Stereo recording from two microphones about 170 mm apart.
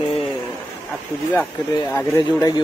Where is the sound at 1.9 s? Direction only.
15° left (ahead or behind).